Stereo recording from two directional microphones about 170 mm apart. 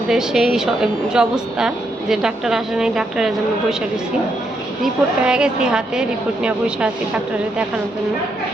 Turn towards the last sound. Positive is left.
turn(degrees=-5)  # may be behind; listen again after turning